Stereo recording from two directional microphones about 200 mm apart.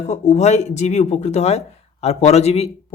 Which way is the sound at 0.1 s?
35° left (ahead or behind).